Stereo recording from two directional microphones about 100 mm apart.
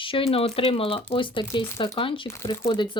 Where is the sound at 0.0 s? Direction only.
65° left (ahead or behind).